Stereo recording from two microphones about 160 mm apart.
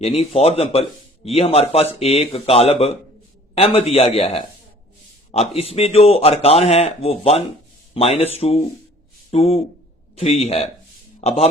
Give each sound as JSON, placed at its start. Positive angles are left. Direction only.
{"t": 0.0, "sound": "a man's voice", "side_deg": 40}